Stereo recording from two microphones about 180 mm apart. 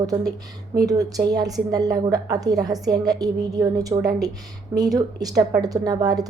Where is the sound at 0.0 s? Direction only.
20° right (ahead or behind).